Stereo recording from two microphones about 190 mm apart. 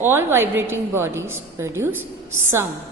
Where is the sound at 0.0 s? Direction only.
10° right (ahead or behind).